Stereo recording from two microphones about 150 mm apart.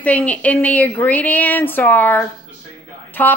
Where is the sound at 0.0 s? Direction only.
10° left (ahead or behind).